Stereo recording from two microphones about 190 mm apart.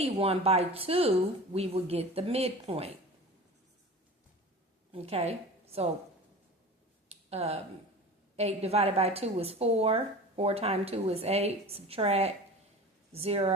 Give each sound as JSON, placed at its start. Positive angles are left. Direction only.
{"t": 0.0, "sound": "a woman's voice", "side_deg": -30}
{"t": 4.9, "sound": "a woman's voice", "side_deg": -30}
{"t": 7.1, "sound": "a sound", "side_deg": -35}
{"t": 8.4, "sound": "a woman's voice", "side_deg": -35}